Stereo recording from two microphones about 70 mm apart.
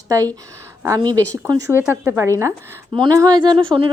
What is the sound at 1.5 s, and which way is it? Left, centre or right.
Speech, right.